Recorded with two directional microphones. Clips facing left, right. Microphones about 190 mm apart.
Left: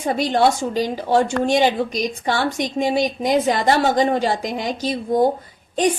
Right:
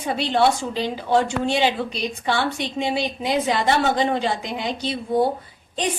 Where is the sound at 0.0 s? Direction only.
45° left (ahead or behind).